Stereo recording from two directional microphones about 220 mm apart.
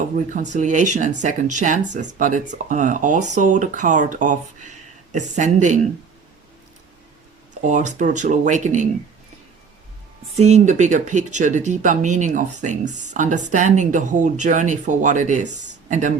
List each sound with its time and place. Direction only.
0.3 s speech: 35° right (ahead or behind)
7.6 s speech: 35° right (ahead or behind)
10.3 s speech: 30° right (ahead or behind)